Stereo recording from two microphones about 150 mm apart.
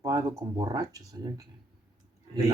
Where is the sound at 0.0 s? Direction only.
25° right (ahead or behind).